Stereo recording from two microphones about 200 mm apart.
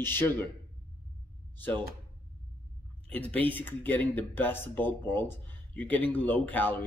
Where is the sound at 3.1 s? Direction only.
5° left (ahead or behind).